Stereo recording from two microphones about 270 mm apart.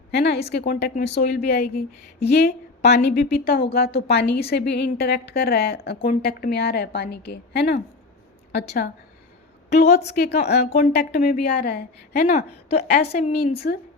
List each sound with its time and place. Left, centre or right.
0.1 s a woman's voice: left
9.7 s a woman's voice: left
10.6 s a woman's voice: left